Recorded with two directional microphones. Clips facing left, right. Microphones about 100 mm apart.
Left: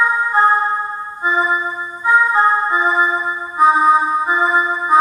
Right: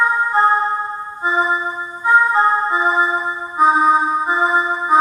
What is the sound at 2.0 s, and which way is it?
Music, 5° left (ahead or behind).